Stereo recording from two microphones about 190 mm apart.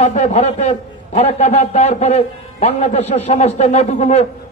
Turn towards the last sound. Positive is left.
turn(degrees=35)  # may be behind; listen again after turning